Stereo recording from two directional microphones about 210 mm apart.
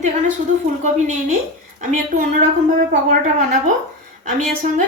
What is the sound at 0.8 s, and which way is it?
A woman's voice, 35° right (ahead or behind).